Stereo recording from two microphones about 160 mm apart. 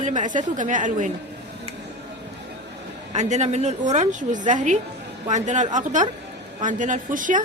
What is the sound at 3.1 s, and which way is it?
A woman's voice, 45° right (ahead or behind).